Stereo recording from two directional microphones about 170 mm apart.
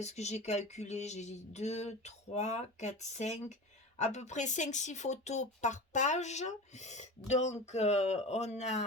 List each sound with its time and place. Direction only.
0.0 s speech: 40° left (ahead or behind)